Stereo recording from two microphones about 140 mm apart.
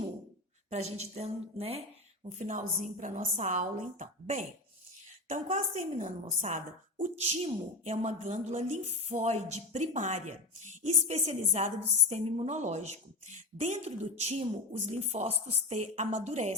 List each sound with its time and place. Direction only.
0.7 s a woman's voice: 50° right (ahead or behind)
2.2 s a woman's voice: 60° right (ahead or behind)
5.5 s a woman's voice: 55° right (ahead or behind)
7.3 s a woman's voice: 50° right (ahead or behind)